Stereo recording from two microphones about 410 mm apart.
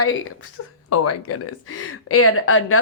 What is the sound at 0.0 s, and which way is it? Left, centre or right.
A woman's voice, left.